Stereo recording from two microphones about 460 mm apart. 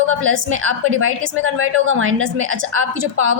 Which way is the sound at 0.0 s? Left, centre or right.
Right.